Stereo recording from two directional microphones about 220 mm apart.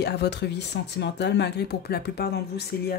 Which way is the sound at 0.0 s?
50° left (ahead or behind).